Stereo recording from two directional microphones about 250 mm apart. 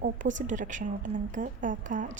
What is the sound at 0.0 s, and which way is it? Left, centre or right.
A woman's voice, right.